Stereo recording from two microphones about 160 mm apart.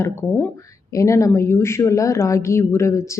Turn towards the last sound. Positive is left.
turn(degrees=20)  # may be behind; listen again after turning